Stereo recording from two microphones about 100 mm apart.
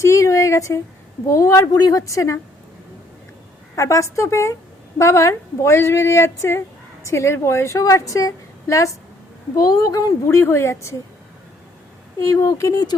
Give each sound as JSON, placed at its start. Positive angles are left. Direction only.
{"t": 0.0, "sound": "a sound", "side_deg": 30}
{"t": 1.3, "sound": "a woman's voice", "side_deg": 30}
{"t": 3.8, "sound": "a woman's voice", "side_deg": 30}
{"t": 10.2, "sound": "speech", "side_deg": 25}
{"t": 12.2, "sound": "a woman's voice", "side_deg": 30}